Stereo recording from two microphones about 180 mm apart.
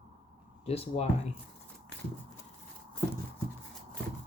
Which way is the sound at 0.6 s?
35° left (ahead or behind).